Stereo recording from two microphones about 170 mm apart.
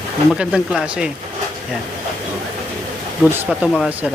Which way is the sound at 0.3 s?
5° right (ahead or behind).